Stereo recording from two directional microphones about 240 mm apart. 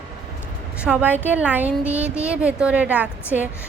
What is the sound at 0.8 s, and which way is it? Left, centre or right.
A woman's voice, centre.